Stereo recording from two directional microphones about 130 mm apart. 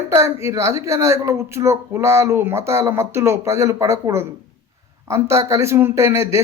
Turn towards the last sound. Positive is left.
turn(degrees=-20)  # may be behind; listen again after turning